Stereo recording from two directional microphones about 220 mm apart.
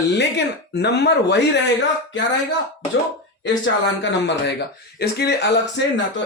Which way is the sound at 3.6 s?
55° left (ahead or behind).